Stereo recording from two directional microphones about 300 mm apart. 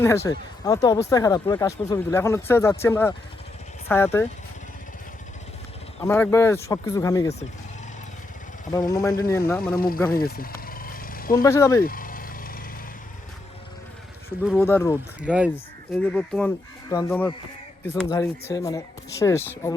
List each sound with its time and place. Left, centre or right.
0.0 s speech: centre
6.0 s speech: centre
8.9 s speech: centre
9.7 s speech: left
10.2 s vehicle: left
11.4 s speech: centre
11.8 s vehicle: left
14.4 s speech: centre
15.2 s speech: centre